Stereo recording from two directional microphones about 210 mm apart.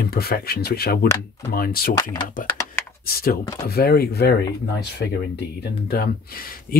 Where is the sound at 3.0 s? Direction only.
45° left (ahead or behind).